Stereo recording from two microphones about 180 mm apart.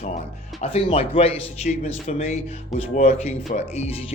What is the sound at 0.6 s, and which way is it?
Speech, 35° left (ahead or behind).